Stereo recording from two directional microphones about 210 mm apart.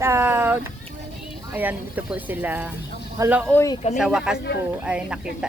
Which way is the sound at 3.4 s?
10° left (ahead or behind).